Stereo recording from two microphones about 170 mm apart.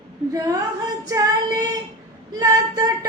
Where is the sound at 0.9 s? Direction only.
20° right (ahead or behind).